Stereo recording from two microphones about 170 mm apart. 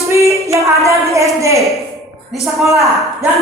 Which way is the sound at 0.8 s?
20° right (ahead or behind).